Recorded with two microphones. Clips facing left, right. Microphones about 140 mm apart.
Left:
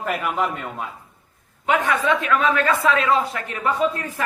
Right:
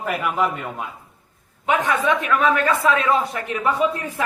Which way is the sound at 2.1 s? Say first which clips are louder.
Right 1 dB; 15° right (ahead or behind).